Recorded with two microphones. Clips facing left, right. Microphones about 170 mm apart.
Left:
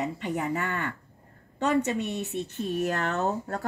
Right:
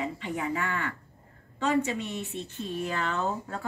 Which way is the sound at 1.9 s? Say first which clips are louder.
Left 4 dB; 65° left (ahead or behind).